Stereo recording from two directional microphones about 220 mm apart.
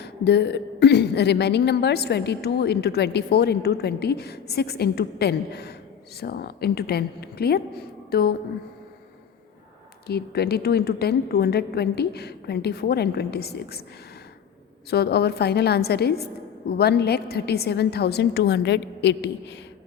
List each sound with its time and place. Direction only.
0.0 s a woman's voice: 50° left (ahead or behind)
10.1 s a woman's voice: 45° left (ahead or behind)
14.8 s a woman's voice: 45° left (ahead or behind)